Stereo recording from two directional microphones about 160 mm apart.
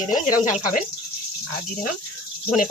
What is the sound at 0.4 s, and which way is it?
Speech, 55° left (ahead or behind).